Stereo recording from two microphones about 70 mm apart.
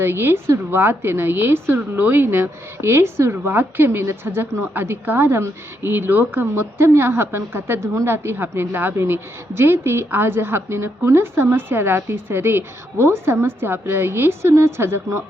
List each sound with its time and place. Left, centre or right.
0.0 s a woman's voice: right